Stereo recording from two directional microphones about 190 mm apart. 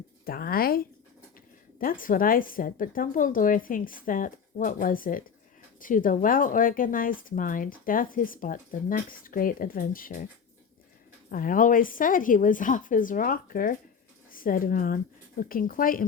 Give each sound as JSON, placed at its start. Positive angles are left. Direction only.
{"t": 0.3, "sound": "speech", "side_deg": 50}
{"t": 1.8, "sound": "speech", "side_deg": 45}
{"t": 11.3, "sound": "speech", "side_deg": 45}